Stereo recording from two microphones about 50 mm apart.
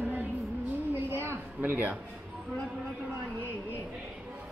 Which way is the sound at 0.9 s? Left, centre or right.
Right.